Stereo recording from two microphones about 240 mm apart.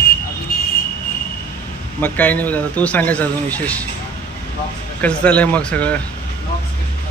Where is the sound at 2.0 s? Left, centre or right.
Centre.